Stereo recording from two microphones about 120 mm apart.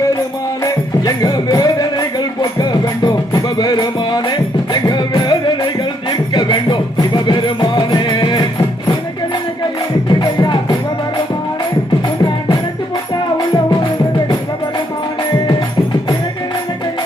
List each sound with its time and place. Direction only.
0.6 s music: 30° left (ahead or behind)
10.1 s music: 40° left (ahead or behind)
12.0 s music: 35° left (ahead or behind)